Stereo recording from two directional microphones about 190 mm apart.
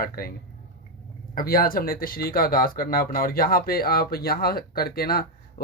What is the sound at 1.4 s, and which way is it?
Speech, 50° left (ahead or behind).